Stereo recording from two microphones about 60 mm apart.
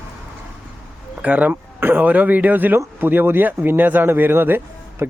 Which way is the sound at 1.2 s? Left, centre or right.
Right.